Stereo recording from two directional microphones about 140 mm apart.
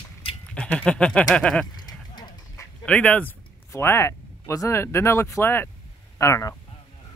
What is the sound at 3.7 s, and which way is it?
Speech, 20° left (ahead or behind).